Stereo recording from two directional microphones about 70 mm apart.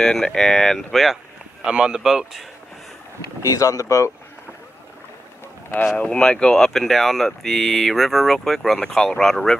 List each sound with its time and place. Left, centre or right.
0.0 s speech: centre
3.2 s speech: left
5.9 s speech: centre